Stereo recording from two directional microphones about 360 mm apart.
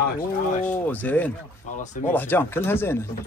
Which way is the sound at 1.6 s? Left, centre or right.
Left.